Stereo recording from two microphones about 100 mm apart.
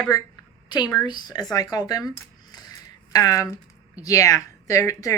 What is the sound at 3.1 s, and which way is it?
A woman's voice, 35° left (ahead or behind).